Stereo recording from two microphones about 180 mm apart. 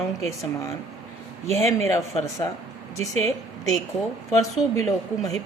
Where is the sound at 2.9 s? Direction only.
40° right (ahead or behind).